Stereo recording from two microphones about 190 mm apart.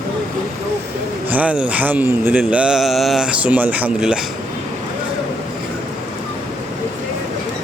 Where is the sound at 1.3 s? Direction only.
5° right (ahead or behind).